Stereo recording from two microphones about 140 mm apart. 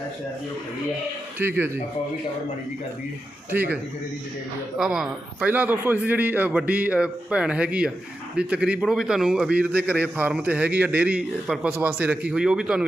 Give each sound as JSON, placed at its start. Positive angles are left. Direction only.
{"t": 1.4, "sound": "a man's voice", "side_deg": -15}
{"t": 3.5, "sound": "a man's voice", "side_deg": -15}
{"t": 4.8, "sound": "a man's voice", "side_deg": -5}